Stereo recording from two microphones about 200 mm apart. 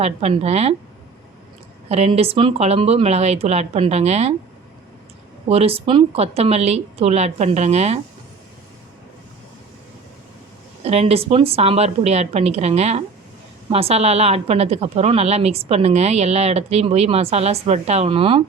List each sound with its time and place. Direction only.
0.0 s a woman's voice: 30° right (ahead or behind)
1.9 s a woman's voice: 30° right (ahead or behind)
5.5 s a woman's voice: 30° right (ahead or behind)
10.8 s a woman's voice: 30° right (ahead or behind)